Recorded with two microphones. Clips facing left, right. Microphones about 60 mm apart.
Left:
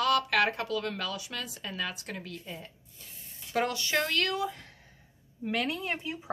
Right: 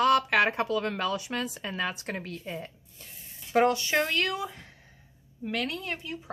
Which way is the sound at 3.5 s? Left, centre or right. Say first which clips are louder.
Right 5 dB; right.